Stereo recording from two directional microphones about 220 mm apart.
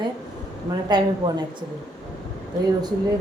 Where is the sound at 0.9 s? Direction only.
20° right (ahead or behind).